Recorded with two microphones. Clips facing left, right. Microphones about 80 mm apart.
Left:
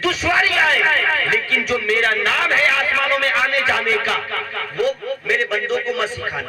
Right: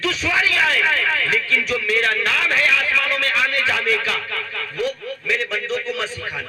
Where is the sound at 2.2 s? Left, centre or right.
Left.